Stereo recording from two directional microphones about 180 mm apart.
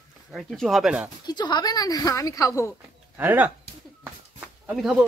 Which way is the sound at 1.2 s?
25° left (ahead or behind).